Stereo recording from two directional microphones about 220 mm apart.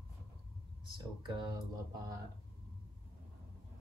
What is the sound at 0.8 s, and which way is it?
Speech, 20° right (ahead or behind).